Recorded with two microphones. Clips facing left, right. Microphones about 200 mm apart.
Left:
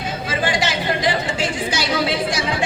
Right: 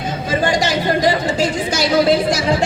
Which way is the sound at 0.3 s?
40° right (ahead or behind).